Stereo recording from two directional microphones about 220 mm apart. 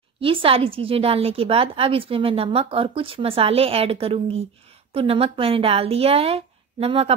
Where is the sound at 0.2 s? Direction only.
25° right (ahead or behind).